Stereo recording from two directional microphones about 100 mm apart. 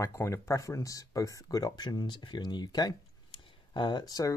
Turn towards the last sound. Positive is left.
turn(degrees=40)  # may be behind; listen again after turning